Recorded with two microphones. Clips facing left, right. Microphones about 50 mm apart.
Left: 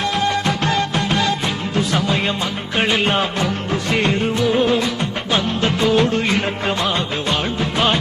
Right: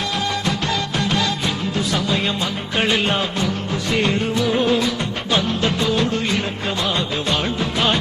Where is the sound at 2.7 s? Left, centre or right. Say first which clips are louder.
Left 1 dB; centre.